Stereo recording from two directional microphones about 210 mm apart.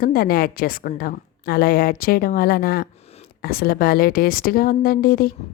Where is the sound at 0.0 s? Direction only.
45° left (ahead or behind).